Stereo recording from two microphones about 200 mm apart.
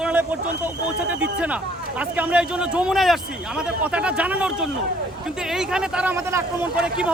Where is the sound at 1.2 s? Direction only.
5° right (ahead or behind).